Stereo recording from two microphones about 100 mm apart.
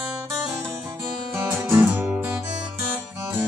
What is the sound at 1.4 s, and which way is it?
Music, 15° right (ahead or behind).